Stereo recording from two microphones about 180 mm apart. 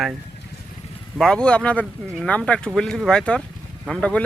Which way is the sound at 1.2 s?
5° left (ahead or behind).